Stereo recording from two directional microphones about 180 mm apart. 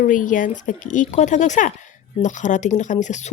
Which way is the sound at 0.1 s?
45° left (ahead or behind).